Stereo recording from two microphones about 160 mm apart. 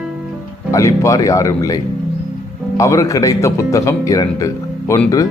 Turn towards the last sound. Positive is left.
turn(degrees=15)  # may be behind; listen again after turning